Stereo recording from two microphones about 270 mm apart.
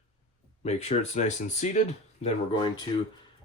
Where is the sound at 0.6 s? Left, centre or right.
Left.